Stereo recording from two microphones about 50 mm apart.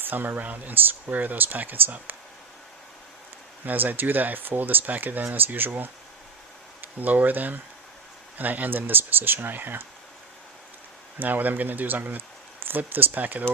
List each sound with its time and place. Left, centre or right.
0.0 s speech: right
3.7 s speech: right
11.2 s speech: right